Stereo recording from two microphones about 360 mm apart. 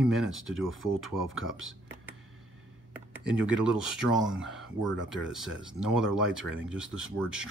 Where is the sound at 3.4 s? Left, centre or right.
Centre.